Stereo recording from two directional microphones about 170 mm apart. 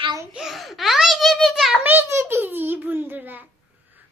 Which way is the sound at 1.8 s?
10° right (ahead or behind).